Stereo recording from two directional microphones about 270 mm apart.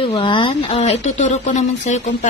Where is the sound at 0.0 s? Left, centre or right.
Centre.